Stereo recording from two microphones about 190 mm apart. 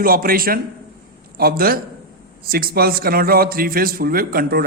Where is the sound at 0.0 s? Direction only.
50° right (ahead or behind).